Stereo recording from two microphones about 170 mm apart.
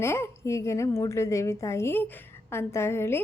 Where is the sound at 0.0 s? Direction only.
15° left (ahead or behind).